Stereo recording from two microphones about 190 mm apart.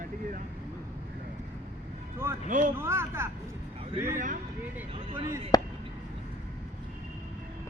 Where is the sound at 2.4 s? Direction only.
40° right (ahead or behind).